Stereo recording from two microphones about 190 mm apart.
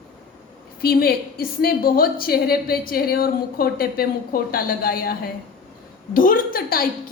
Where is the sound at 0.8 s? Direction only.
50° left (ahead or behind).